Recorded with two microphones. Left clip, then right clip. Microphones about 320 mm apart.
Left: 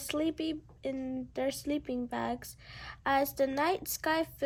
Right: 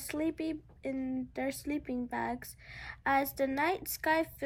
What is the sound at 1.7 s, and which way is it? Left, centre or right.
Speech, left.